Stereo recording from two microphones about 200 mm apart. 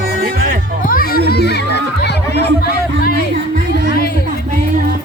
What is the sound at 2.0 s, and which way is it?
Chatter, 55° left (ahead or behind).